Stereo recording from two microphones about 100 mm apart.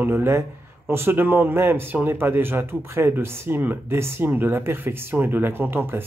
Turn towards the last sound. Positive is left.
turn(degrees=-20)  # may be behind; listen again after turning